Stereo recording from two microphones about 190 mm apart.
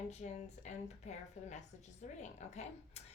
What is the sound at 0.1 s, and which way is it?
A woman's voice, 35° left (ahead or behind).